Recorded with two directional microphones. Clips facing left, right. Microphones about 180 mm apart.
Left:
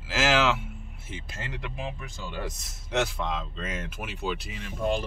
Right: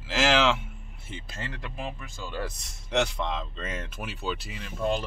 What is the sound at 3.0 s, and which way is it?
Speech, 5° left (ahead or behind).